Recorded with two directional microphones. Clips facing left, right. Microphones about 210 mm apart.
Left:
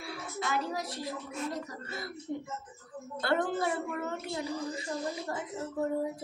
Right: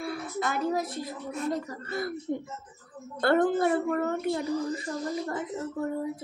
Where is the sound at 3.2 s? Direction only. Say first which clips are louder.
Right 7 dB; 55° right (ahead or behind).